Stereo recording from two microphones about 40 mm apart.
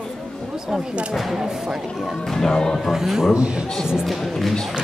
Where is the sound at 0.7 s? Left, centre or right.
Centre.